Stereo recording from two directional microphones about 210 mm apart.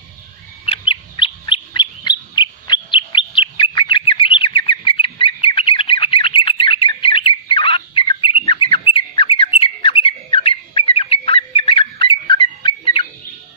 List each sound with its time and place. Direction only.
0.7 s bird: 25° left (ahead or behind)